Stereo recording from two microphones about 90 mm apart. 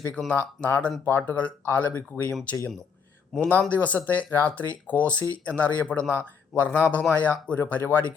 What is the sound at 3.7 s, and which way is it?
Speech, 20° left (ahead or behind).